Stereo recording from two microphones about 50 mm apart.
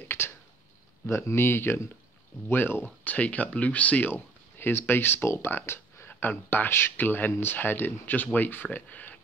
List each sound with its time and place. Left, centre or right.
1.0 s speech: left
4.1 s speech: left
6.0 s speech: left